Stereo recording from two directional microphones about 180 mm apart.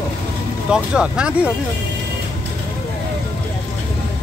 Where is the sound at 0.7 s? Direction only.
5° right (ahead or behind).